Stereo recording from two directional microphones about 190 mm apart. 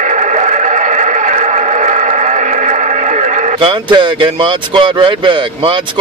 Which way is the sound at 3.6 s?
25° right (ahead or behind).